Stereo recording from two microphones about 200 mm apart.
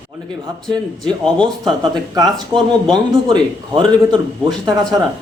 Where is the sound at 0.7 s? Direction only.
5° left (ahead or behind).